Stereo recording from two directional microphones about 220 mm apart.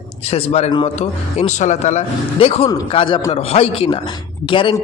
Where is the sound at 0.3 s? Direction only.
25° left (ahead or behind).